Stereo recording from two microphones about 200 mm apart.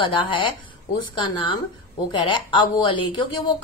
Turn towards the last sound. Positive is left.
turn(degrees=25)  # may be behind; listen again after turning